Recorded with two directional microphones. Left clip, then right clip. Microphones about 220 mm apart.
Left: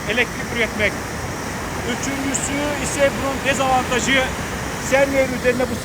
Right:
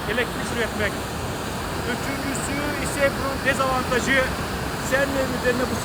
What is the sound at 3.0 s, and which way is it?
Speech, 45° left (ahead or behind).